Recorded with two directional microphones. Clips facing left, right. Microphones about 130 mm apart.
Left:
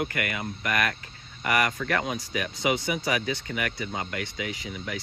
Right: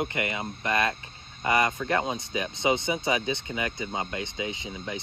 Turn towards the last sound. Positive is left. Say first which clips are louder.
# even
turn(degrees=-25)  # may be behind; listen again after turning